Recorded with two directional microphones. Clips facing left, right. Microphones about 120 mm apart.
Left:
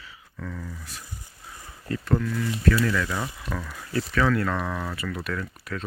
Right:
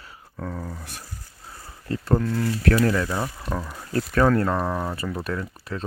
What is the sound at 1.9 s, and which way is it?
Speech, 35° right (ahead or behind).